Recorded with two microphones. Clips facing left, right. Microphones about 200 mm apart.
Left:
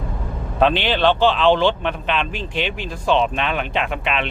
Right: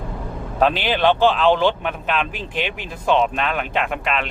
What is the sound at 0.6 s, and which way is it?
Speech, 10° right (ahead or behind).